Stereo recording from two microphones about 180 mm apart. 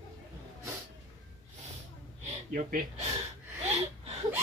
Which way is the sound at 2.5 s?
50° right (ahead or behind).